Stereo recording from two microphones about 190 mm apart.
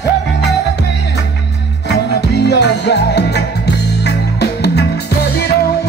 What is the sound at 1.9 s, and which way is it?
Music, 60° left (ahead or behind).